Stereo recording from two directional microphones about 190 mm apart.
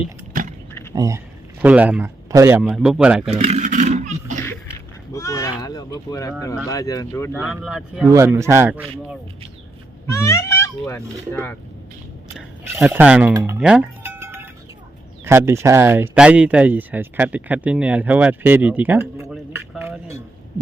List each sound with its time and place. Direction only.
0.4 s keys jangling: 45° right (ahead or behind)
0.9 s speech: 15° right (ahead or behind)
3.2 s a sound: 35° right (ahead or behind)
5.1 s a sound: 15° left (ahead or behind)
6.7 s speech: 20° left (ahead or behind)
7.3 s speech: 5° right (ahead or behind)
8.1 s speech: 15° right (ahead or behind)
10.1 s speech: 15° left (ahead or behind)
12.7 s speech: 10° right (ahead or behind)
13.4 s cowbell: 5° right (ahead or behind)
15.2 s speech: 10° right (ahead or behind)
19.3 s a sound: 5° right (ahead or behind)